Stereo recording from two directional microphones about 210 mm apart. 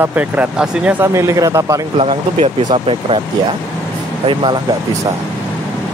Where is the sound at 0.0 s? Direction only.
5° right (ahead or behind).